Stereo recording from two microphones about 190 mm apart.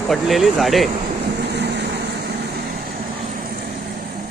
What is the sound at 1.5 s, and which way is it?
Vehicle, 60° right (ahead or behind).